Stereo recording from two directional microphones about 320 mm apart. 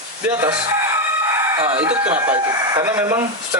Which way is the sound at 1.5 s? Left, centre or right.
Centre.